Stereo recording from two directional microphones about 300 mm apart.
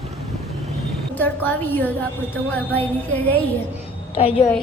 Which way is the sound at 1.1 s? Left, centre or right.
Centre.